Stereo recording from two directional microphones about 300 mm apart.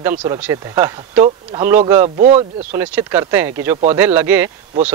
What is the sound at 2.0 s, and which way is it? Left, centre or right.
Speech, right.